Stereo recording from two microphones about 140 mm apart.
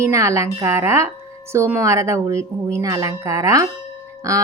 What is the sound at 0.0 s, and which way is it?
Speech, 20° right (ahead or behind).